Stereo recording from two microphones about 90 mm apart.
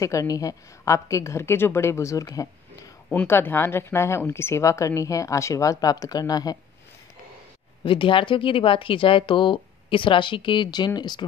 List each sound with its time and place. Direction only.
0.0 s speech: 40° left (ahead or behind)
3.1 s speech: 20° left (ahead or behind); by 6.6 s 45° left (ahead or behind)
7.8 s speech: 70° left (ahead or behind); by 11.2 s 55° left (ahead or behind)